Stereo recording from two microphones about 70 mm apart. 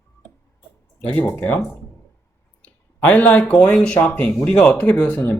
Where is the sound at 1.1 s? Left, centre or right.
Left.